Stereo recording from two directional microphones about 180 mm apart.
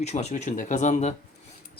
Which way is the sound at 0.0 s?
40° left (ahead or behind).